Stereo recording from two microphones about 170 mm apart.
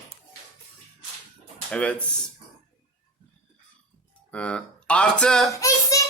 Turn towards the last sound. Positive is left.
turn(degrees=20)  # may be behind; listen again after turning